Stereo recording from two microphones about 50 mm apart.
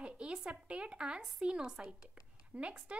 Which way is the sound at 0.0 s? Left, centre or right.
Centre.